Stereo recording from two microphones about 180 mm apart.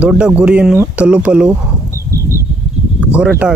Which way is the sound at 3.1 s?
5° right (ahead or behind).